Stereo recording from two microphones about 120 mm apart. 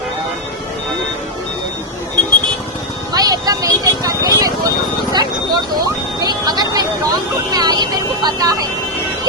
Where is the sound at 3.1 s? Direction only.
30° right (ahead or behind).